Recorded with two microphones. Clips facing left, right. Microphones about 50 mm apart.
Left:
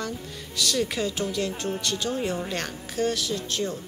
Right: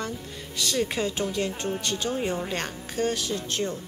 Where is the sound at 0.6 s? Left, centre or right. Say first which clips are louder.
Left 1 dB; right.